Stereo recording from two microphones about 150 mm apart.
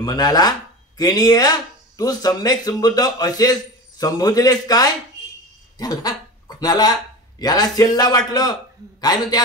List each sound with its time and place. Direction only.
0.0 s speech: 25° left (ahead or behind)